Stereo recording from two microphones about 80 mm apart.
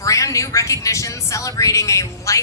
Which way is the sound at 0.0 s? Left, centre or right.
Left.